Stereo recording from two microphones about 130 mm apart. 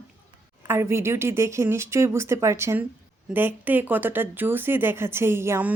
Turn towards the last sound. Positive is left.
turn(degrees=-15)  # may be behind; listen again after turning